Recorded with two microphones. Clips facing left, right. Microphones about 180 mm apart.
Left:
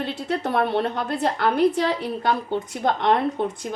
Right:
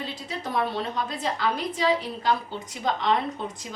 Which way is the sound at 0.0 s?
65° left (ahead or behind).